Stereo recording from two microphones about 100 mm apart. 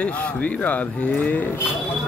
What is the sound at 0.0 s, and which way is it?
Speech, 15° left (ahead or behind).